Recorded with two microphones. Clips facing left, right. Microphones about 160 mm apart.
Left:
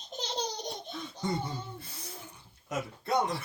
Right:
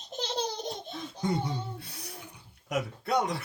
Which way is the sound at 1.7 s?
70° right (ahead or behind).